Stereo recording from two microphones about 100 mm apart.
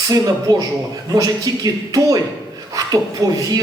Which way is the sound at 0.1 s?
40° right (ahead or behind).